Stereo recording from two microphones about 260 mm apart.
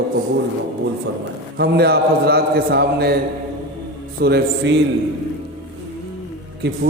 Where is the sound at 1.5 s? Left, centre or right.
Right.